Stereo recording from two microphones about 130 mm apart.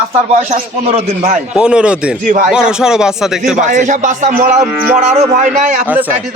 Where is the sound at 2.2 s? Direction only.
90° right.